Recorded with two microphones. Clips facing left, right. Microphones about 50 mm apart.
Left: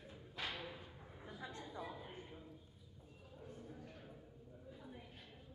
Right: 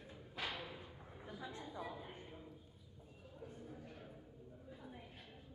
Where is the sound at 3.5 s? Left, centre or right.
Centre.